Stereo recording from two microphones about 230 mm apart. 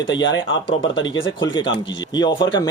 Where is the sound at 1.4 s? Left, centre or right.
Centre.